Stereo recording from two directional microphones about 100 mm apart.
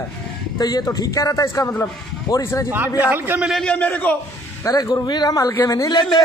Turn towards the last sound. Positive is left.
turn(degrees=35)  # may be behind; listen again after turning